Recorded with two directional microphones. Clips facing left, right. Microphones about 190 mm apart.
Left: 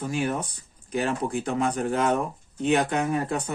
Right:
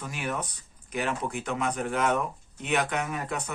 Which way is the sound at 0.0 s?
35° left (ahead or behind).